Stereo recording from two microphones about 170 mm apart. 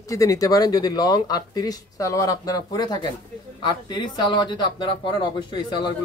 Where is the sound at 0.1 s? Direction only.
20° left (ahead or behind).